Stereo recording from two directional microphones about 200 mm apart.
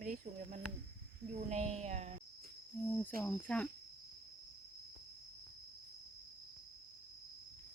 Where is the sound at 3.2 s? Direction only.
5° left (ahead or behind).